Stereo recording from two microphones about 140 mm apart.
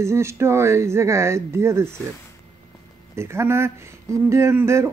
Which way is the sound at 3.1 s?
20° right (ahead or behind).